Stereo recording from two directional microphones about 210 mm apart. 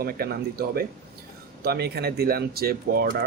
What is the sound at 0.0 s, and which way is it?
Speech, 45° right (ahead or behind).